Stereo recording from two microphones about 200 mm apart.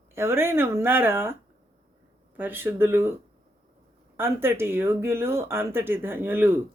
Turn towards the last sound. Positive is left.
turn(degrees=-10)  # may be behind; listen again after turning